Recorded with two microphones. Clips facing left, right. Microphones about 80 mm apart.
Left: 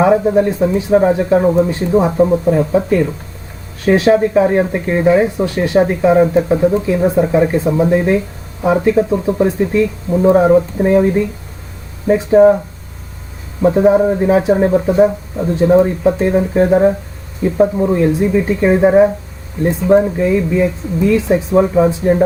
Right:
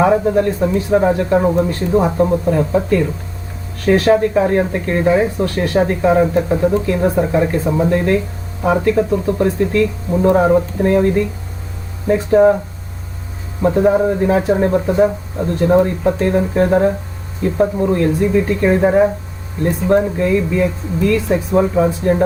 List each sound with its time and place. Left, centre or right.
0.3 s speech: centre
1.6 s speech: centre
3.8 s speech: centre
10.2 s speech: centre
13.6 s speech: centre